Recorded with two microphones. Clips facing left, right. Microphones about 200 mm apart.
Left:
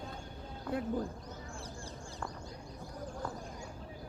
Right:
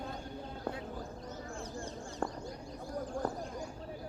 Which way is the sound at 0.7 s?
55° left (ahead or behind).